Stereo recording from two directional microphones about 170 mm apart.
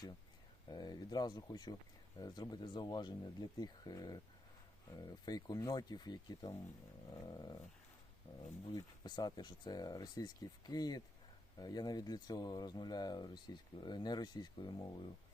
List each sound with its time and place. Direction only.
0.7 s speech: 25° left (ahead or behind)
7.3 s dog: 25° left (ahead or behind)
8.7 s speech: 25° left (ahead or behind)